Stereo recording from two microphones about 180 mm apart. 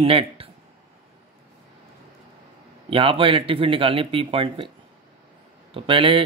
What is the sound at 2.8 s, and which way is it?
Speech, 30° right (ahead or behind).